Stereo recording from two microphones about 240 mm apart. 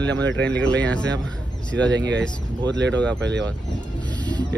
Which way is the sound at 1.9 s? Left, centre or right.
Right.